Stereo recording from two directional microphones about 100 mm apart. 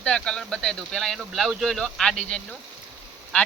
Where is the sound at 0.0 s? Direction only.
10° left (ahead or behind).